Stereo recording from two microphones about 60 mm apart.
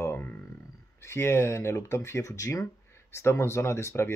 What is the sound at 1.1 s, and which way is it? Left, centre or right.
Speech, left.